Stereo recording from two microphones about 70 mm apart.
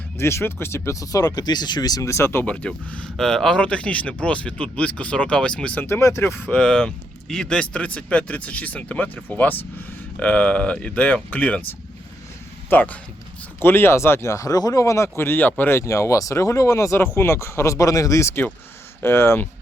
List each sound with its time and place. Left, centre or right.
0.2 s speech: left
2.0 s speech: left
2.5 s speech: centre
3.2 s speech: centre
3.6 s speech: centre
5.8 s speech: left
6.4 s speech: centre
12.7 s speech: left
13.6 s speech: left
15.8 s speech: left